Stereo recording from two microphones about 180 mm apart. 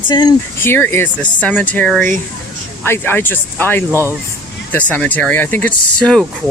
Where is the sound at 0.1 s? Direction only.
20° left (ahead or behind).